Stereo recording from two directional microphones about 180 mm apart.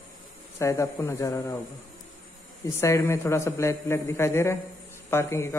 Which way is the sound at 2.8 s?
15° left (ahead or behind).